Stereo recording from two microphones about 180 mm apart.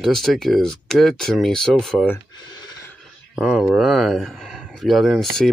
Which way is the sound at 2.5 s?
25° left (ahead or behind).